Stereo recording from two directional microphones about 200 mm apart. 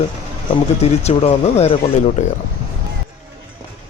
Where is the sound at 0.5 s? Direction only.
30° left (ahead or behind).